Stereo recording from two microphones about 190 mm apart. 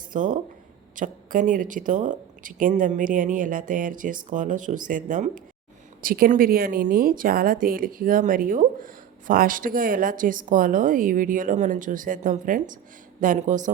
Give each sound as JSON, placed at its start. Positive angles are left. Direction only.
{"t": 0.1, "sound": "a woman's voice", "side_deg": -45}